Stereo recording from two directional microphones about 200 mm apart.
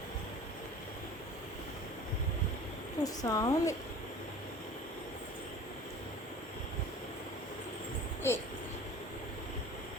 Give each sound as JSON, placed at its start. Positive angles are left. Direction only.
{"t": 3.0, "sound": "a woman's voice", "side_deg": 15}
{"t": 8.2, "sound": "a woman's voice", "side_deg": 15}